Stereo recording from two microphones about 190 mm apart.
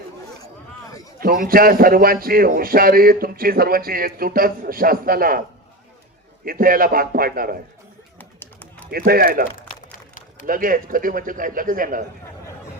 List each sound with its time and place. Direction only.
1.2 s speech: 50° right (ahead or behind)
6.4 s speech: 50° right (ahead or behind)
8.2 s a sound: 10° left (ahead or behind)
8.9 s speech: 50° right (ahead or behind)
9.6 s a sound: 45° left (ahead or behind)
10.4 s speech: 45° right (ahead or behind)